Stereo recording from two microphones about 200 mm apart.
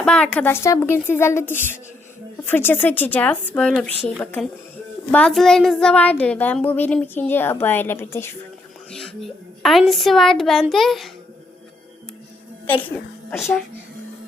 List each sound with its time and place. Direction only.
0.0 s a child's voice: 5° left (ahead or behind)
8.9 s a woman's voice: centre (ahead or behind)
12.6 s a woman's voice: 10° left (ahead or behind)